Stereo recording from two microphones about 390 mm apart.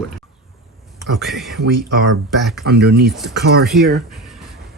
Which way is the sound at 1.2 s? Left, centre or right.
Centre.